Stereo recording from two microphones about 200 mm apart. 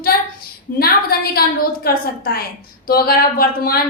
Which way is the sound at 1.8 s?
45° left (ahead or behind).